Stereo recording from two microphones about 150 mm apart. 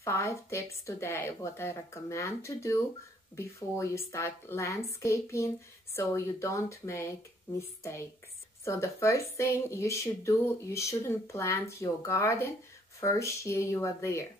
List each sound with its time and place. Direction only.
0.0 s speech: 20° left (ahead or behind)